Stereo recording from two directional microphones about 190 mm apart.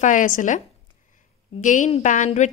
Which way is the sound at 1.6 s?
40° left (ahead or behind).